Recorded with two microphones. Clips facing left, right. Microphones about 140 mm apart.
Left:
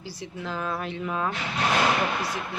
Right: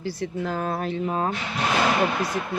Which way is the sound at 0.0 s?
55° right (ahead or behind).